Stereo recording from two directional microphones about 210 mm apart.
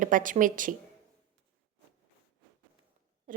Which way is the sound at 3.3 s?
40° right (ahead or behind).